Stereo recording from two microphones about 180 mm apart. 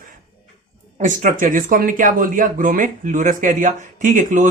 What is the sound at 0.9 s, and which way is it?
A man's voice, 45° right (ahead or behind).